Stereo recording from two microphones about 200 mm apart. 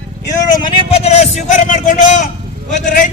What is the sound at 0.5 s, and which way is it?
Speech, 25° left (ahead or behind).